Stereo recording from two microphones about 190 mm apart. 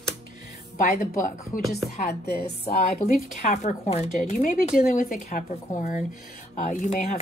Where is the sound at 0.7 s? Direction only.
45° left (ahead or behind).